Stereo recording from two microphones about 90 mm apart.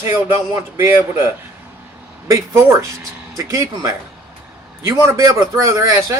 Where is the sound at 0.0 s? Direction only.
30° right (ahead or behind).